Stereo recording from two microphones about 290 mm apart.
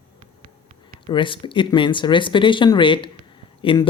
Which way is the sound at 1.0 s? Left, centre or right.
Centre.